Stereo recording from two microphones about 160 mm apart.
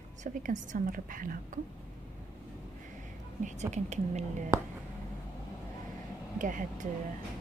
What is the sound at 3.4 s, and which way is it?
Speech, 45° right (ahead or behind).